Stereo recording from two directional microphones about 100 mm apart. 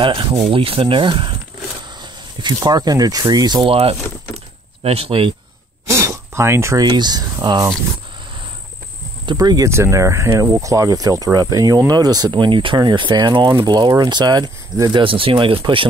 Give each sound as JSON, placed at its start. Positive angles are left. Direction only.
{"t": 0.0, "sound": "speech", "side_deg": -55}
{"t": 0.5, "sound": "speech", "side_deg": -65}
{"t": 2.0, "sound": "speech", "side_deg": -45}
{"t": 3.6, "sound": "speech", "side_deg": -85}
{"t": 5.9, "sound": "a sound", "side_deg": -30}
{"t": 6.8, "sound": "speech", "side_deg": -45}
{"t": 9.2, "sound": "speech", "side_deg": -45}
{"t": 9.7, "sound": "speech", "side_deg": -30}
{"t": 15.0, "sound": "speech", "side_deg": -60}